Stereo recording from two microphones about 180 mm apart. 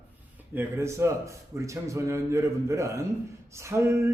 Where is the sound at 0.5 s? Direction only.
15° right (ahead or behind).